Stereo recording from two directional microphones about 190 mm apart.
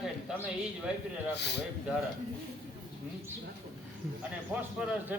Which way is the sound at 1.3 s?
60° left (ahead or behind).